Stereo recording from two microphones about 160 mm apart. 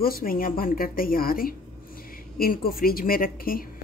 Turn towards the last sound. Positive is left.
turn(degrees=65)  # may be behind; listen again after turning